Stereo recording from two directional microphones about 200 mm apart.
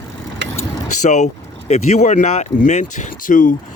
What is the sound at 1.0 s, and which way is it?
Speech, 35° left (ahead or behind).